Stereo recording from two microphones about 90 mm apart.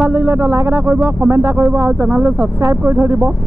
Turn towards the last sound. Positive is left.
turn(degrees=-30)  # may be behind; listen again after turning